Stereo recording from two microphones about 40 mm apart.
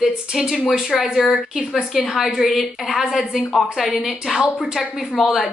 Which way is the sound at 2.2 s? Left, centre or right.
Centre.